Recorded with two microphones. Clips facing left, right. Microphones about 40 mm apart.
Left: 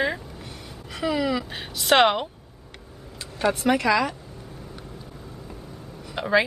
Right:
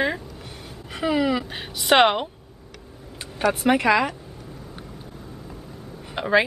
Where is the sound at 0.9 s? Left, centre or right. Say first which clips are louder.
Right 2 dB; centre.